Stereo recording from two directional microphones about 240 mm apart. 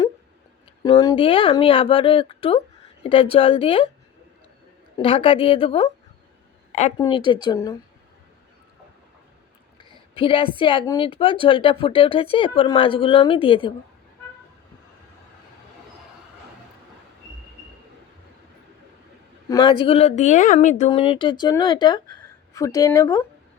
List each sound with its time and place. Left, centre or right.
0.8 s a woman's voice: centre
4.9 s a woman's voice: left
6.9 s speech: centre
10.2 s a woman's voice: left
19.5 s a woman's voice: centre